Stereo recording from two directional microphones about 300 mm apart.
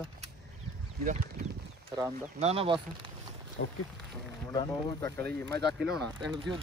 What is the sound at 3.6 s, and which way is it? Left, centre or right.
Speech, left.